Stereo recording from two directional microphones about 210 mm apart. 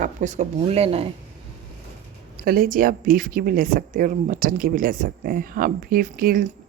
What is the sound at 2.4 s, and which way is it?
Speech, 45° right (ahead or behind).